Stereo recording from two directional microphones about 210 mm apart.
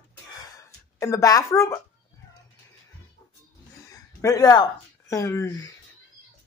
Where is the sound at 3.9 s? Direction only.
15° left (ahead or behind).